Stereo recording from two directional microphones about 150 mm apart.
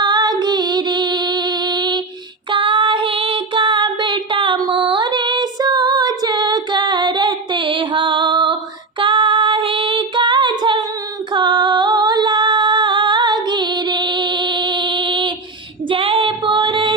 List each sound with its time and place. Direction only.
0.0 s music: 30° right (ahead or behind)
2.5 s child singing: 35° right (ahead or behind)
9.0 s female singing: 35° right (ahead or behind)